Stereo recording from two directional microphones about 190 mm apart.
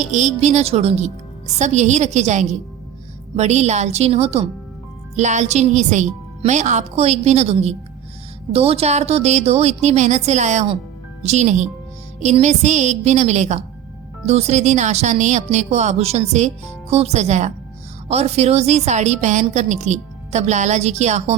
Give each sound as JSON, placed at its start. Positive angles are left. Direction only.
{"t": 0.0, "sound": "speech", "side_deg": -40}